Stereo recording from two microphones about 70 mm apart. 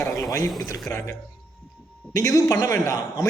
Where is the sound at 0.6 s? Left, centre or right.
Left.